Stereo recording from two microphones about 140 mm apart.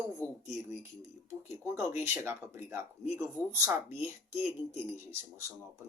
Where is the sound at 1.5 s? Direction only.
20° right (ahead or behind).